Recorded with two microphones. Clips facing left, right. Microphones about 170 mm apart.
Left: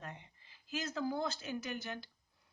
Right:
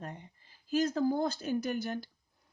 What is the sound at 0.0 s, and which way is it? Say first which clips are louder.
Speech: right 5 dB; 40° right (ahead or behind).